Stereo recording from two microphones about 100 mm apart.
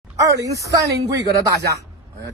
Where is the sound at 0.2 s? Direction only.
35° right (ahead or behind).